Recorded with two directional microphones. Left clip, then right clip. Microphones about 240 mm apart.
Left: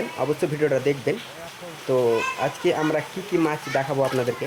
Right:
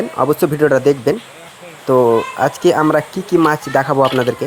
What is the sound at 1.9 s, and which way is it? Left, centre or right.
Speech, right.